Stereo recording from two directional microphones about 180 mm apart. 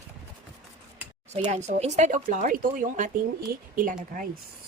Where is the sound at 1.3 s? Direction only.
40° right (ahead or behind).